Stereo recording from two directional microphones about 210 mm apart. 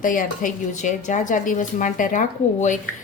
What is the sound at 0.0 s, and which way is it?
Speech, 40° left (ahead or behind).